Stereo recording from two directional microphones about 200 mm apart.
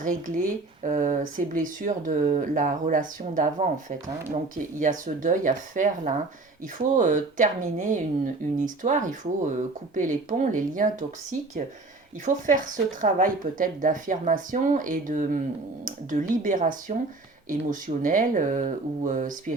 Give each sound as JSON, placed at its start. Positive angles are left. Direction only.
{"t": 0.0, "sound": "speech", "side_deg": -40}